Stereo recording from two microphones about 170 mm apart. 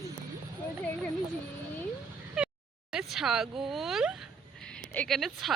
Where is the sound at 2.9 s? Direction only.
5° right (ahead or behind).